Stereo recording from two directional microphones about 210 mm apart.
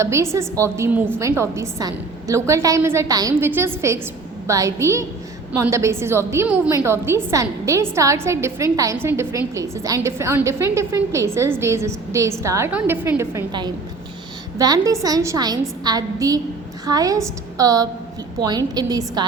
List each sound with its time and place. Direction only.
0.0 s a woman's voice: 15° right (ahead or behind)